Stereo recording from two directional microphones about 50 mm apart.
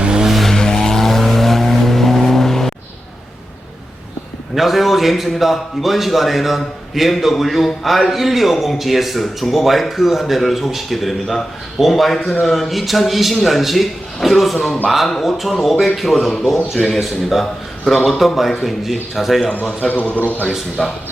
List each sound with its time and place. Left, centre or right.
0.0 s vehicle: centre
0.3 s vehicle: centre
0.5 s vehicle: centre
4.5 s a man's voice: centre
19.9 s a man's voice: left
20.5 s a man's voice: centre